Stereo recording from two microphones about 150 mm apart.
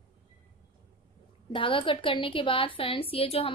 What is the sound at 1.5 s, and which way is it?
A woman's voice, 35° left (ahead or behind).